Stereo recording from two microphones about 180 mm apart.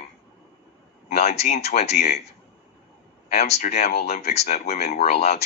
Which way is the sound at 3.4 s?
40° left (ahead or behind).